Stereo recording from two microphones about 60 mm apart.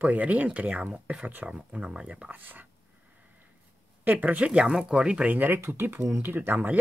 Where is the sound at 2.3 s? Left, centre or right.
Right.